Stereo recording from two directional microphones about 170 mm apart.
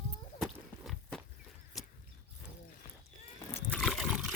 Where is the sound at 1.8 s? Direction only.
Centre (ahead or behind).